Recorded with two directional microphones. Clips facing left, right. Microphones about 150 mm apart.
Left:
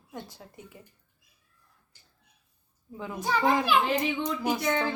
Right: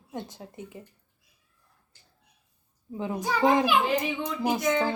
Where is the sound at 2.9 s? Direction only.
20° right (ahead or behind).